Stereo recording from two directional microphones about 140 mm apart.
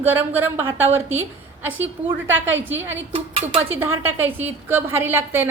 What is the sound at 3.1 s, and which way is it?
Speech, 40° right (ahead or behind).